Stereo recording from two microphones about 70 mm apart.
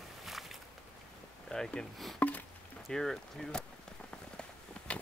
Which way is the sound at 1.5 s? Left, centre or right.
Centre.